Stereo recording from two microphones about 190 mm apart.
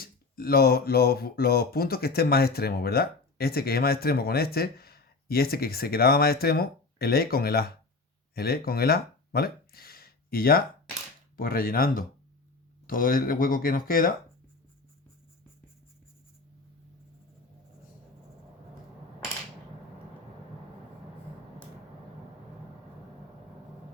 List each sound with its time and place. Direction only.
0.0 s speech: 50° left (ahead or behind)